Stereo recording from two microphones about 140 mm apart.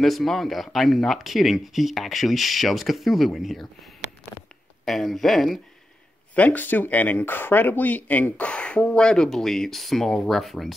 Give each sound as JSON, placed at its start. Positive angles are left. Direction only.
{"t": 0.0, "sound": "speech", "side_deg": 0}
{"t": 4.8, "sound": "speech", "side_deg": 0}